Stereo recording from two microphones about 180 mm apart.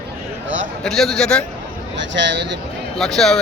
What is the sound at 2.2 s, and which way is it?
Speech, 75° right (ahead or behind).